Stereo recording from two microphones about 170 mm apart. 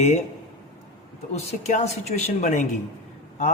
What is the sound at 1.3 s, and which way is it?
Speech, 40° left (ahead or behind).